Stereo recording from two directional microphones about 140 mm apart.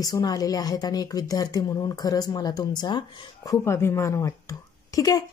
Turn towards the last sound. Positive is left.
turn(degrees=25)  # may be behind; listen again after turning